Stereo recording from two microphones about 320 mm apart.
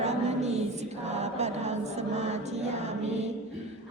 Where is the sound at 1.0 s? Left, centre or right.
Right.